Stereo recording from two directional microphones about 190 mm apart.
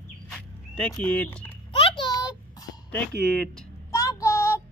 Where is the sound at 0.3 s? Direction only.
5° left (ahead or behind).